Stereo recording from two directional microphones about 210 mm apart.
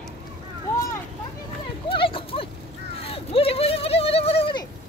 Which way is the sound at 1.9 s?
25° left (ahead or behind).